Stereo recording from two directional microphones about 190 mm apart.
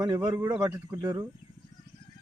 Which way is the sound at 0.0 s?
20° right (ahead or behind).